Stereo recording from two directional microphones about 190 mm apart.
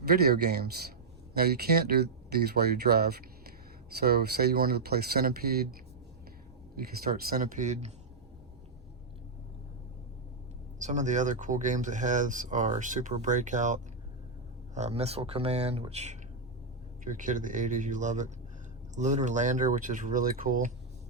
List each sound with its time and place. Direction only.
0.1 s speech: 55° right (ahead or behind)
7.0 s speech: 50° right (ahead or behind)
10.8 s speech: 40° right (ahead or behind)
14.8 s speech: 35° right (ahead or behind)